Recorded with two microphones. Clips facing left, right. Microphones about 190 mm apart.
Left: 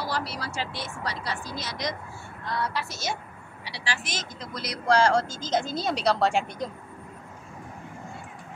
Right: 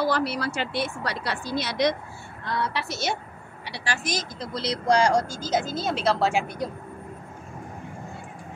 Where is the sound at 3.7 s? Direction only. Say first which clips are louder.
Right 4 dB; 45° right (ahead or behind).